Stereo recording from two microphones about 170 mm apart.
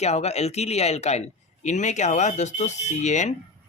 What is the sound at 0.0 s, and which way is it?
Speech, 40° left (ahead or behind).